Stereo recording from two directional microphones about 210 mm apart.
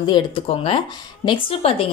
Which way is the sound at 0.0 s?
25° left (ahead or behind).